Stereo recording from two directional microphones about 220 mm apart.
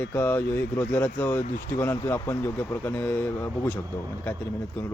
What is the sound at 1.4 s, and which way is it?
Speech, 35° left (ahead or behind).